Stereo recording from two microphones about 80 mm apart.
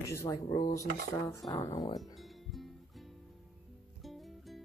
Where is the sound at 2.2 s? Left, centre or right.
Centre.